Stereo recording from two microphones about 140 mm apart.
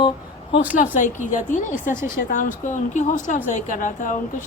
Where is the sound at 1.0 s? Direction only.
65° left (ahead or behind).